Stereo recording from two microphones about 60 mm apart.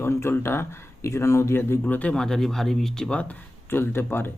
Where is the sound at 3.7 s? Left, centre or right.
Left.